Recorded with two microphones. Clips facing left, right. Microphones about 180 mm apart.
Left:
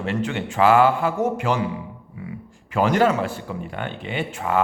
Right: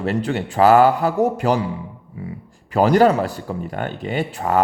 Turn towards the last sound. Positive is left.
turn(degrees=-40)  # may be behind; listen again after turning